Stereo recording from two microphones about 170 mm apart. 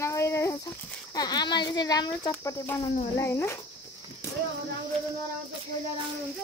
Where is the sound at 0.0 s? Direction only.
15° left (ahead or behind).